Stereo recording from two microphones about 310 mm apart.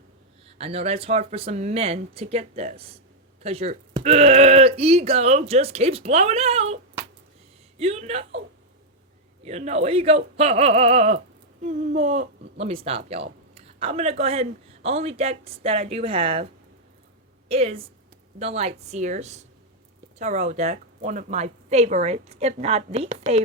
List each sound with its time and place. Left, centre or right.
0.6 s speech: centre
7.8 s speech: centre
9.4 s speech: right
17.5 s speech: centre